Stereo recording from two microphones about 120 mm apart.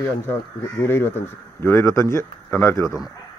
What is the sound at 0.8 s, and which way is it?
A man's voice, 20° left (ahead or behind).